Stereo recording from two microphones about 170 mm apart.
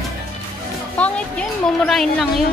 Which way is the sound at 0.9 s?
5° left (ahead or behind).